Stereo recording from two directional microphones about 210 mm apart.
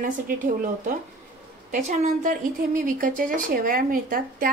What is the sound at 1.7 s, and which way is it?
A woman's voice, 35° right (ahead or behind).